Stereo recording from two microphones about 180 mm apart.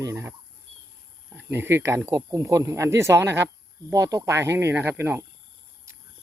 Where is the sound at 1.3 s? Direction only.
10° right (ahead or behind).